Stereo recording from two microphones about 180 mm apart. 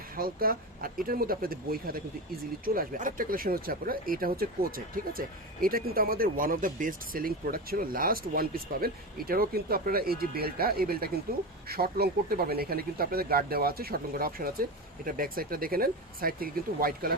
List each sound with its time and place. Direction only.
0.2 s speech: 55° right (ahead or behind)